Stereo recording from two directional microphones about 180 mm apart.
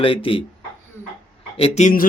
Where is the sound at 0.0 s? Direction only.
30° left (ahead or behind).